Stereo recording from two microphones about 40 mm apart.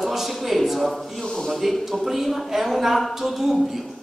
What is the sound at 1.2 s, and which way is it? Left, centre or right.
Speech, centre.